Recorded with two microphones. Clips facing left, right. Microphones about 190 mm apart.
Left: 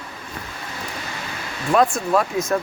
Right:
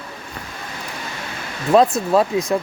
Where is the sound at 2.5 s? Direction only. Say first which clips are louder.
Left 1 dB; 15° right (ahead or behind).